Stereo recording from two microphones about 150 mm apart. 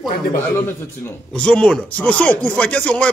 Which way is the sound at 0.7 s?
10° left (ahead or behind).